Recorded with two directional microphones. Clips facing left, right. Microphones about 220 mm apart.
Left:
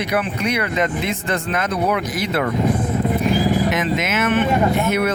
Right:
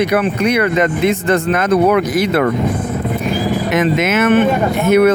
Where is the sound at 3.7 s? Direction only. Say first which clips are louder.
Right 6 dB; 60° right (ahead or behind).